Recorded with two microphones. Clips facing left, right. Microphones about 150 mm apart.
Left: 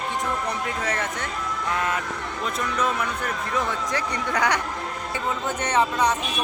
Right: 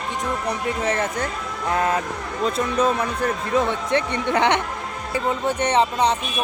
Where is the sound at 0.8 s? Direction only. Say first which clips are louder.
Right 5 dB; 30° right (ahead or behind).